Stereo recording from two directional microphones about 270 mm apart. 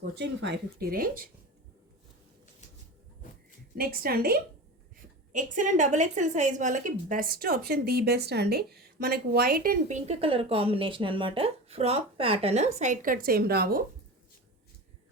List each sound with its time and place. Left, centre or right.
0.0 s speech: right
3.8 s a woman's voice: right